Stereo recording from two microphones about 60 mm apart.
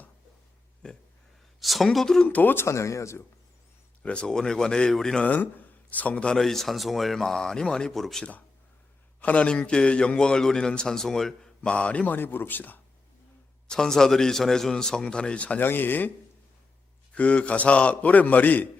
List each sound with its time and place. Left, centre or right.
0.8 s speech: centre
1.5 s a woman's voice: centre
2.2 s a man's voice: left
2.6 s speech: left
4.0 s speech: centre
5.2 s speech: left; by 8.2 s centre
8.2 s a man's voice: left; by 11.7 s centre
11.7 s a man's voice: left
12.1 s speech: left
13.7 s speech: centre
15.6 s speech: left
17.2 s a man's voice: left